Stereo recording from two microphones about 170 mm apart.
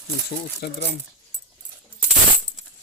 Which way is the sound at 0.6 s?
70° left (ahead or behind).